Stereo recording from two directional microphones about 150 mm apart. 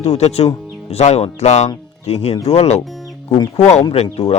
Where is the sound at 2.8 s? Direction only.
Centre (ahead or behind).